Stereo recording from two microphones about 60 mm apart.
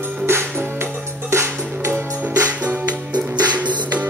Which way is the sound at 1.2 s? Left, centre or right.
Right.